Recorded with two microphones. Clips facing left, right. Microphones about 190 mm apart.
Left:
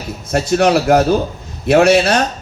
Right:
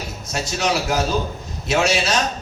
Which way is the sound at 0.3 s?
55° left (ahead or behind).